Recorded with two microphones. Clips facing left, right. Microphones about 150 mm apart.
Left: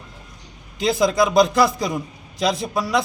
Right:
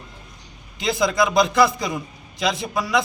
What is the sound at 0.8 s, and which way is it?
A man's voice, 35° left (ahead or behind).